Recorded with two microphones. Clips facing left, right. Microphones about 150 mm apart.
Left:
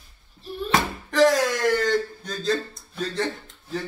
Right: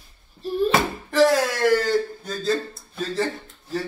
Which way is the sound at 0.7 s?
5° right (ahead or behind).